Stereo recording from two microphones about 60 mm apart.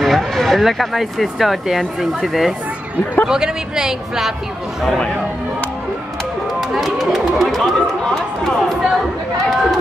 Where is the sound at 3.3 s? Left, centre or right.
Centre.